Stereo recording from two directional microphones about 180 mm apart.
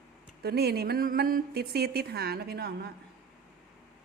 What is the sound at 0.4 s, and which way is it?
Speech, 60° right (ahead or behind).